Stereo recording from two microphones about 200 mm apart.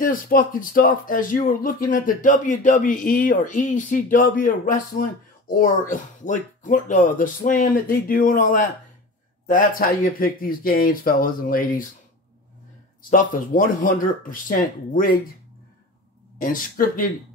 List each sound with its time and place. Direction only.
0.0 s speech: 45° left (ahead or behind)
13.1 s speech: 40° left (ahead or behind)
16.3 s speech: 45° left (ahead or behind)